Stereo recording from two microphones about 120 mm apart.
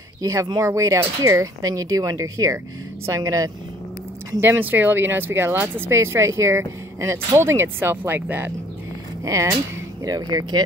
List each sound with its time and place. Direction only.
0.2 s speech: 25° right (ahead or behind)
4.4 s speech: 15° right (ahead or behind); by 10.6 s 35° right (ahead or behind)